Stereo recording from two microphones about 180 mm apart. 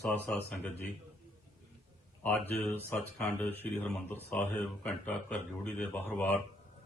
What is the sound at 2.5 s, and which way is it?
Speech, 10° left (ahead or behind).